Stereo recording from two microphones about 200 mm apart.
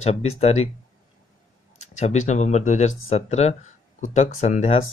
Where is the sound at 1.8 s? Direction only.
35° left (ahead or behind).